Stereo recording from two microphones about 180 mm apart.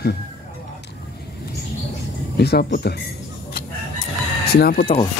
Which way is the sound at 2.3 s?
65° left (ahead or behind).